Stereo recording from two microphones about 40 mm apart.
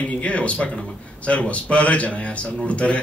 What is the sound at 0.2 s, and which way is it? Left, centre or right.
Speech, left.